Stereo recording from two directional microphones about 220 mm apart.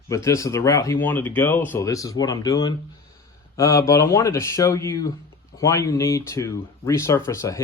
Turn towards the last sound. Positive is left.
turn(degrees=15)  # may be behind; listen again after turning